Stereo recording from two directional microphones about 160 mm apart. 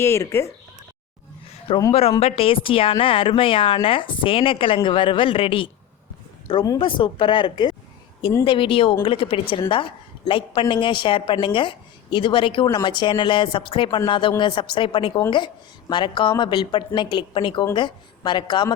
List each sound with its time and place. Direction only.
0.0 s speech: 15° left (ahead or behind)
1.9 s a woman's voice: 35° left (ahead or behind)
6.7 s a woman's voice: 30° left (ahead or behind)